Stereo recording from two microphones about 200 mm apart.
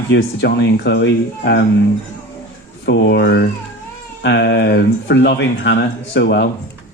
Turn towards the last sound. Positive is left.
turn(degrees=60)  # may be behind; listen again after turning